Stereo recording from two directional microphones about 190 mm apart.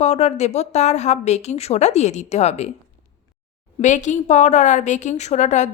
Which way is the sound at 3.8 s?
40° left (ahead or behind).